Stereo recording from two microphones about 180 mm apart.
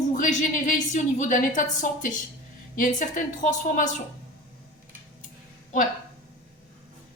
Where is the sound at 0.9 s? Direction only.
45° left (ahead or behind).